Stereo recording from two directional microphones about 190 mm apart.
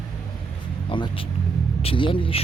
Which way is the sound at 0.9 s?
25° left (ahead or behind).